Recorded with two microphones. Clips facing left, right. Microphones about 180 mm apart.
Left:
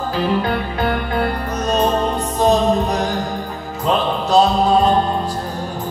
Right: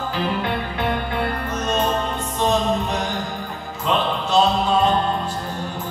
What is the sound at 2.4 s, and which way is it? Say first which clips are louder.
Music: left 5 dB; 35° left (ahead or behind).